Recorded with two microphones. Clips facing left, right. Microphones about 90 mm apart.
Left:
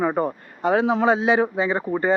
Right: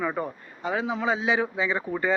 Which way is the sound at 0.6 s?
65° left (ahead or behind).